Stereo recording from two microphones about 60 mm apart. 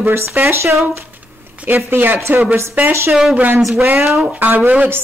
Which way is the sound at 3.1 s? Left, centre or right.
Centre.